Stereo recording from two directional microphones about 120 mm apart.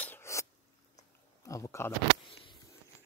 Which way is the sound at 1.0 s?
25° left (ahead or behind).